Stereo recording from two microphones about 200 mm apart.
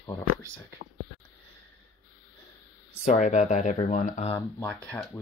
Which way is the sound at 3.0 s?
35° left (ahead or behind).